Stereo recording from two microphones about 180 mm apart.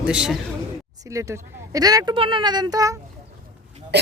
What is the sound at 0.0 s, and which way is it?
Speech, 5° right (ahead or behind).